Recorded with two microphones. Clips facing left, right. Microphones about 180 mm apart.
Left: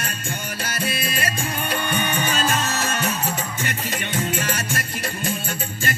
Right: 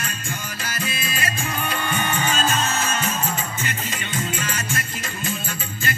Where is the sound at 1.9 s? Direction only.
70° left (ahead or behind).